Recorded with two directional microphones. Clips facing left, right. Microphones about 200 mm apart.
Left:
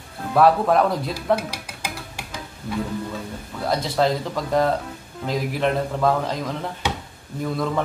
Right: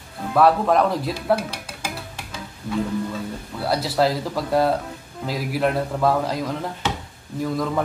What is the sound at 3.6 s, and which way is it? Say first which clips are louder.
A man's voice: even; 5° right (ahead or behind).